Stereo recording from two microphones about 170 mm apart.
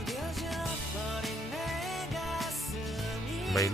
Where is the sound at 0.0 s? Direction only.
Centre (ahead or behind).